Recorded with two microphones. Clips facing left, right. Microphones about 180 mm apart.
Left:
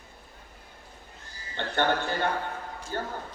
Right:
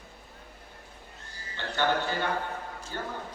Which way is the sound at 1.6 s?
55° left (ahead or behind).